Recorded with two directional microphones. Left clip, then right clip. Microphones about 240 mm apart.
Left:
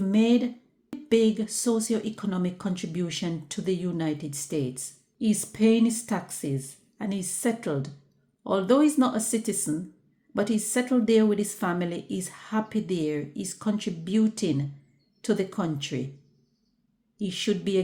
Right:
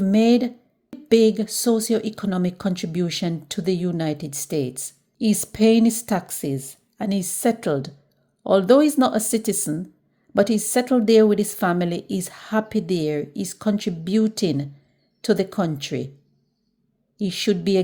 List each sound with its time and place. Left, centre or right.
0.0 s speech: right
17.2 s speech: right